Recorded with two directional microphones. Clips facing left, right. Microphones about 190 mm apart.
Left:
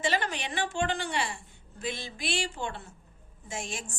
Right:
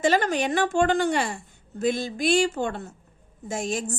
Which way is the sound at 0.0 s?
45° right (ahead or behind).